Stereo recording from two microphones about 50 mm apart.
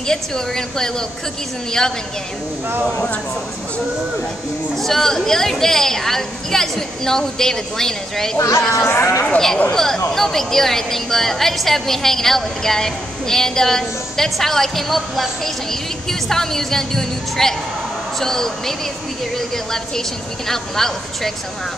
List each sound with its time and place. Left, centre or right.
0.0 s a woman's voice: centre
2.9 s speech: left
4.7 s a woman's voice: centre
8.4 s speech: left
9.7 s a woman's voice: centre